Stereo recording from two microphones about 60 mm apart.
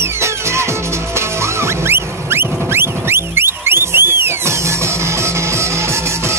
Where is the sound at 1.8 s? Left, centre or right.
Right.